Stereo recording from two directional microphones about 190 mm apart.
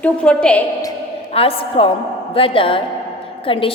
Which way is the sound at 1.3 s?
30° left (ahead or behind).